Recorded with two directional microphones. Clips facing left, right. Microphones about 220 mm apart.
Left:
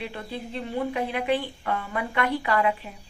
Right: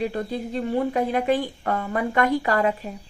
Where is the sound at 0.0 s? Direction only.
40° right (ahead or behind).